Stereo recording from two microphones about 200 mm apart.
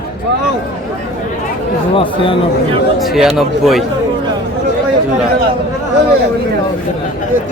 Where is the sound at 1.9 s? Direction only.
25° left (ahead or behind).